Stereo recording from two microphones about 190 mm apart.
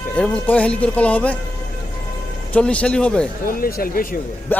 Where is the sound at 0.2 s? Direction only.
5° left (ahead or behind).